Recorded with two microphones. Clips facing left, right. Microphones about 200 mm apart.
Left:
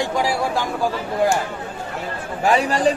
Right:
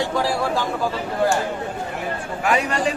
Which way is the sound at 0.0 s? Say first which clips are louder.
Left 1 dB; 15° left (ahead or behind).